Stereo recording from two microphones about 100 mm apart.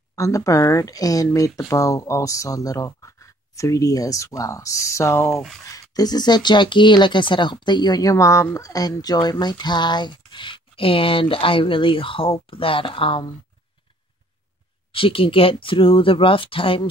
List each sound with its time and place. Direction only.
0.1 s speech: 35° left (ahead or behind)
5.7 s speech: 40° left (ahead or behind); by 13.2 s 65° left (ahead or behind)
14.9 s speech: 65° left (ahead or behind)